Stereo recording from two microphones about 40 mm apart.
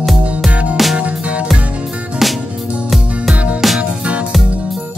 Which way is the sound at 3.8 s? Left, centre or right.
Right.